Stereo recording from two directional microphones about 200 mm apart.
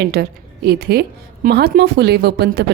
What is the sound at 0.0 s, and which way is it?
A woman's voice, 55° right (ahead or behind).